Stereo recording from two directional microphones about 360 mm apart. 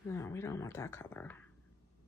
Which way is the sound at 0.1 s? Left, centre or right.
Centre.